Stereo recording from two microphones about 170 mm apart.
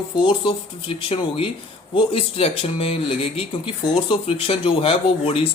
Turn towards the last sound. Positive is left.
turn(degrees=35)  # may be behind; listen again after turning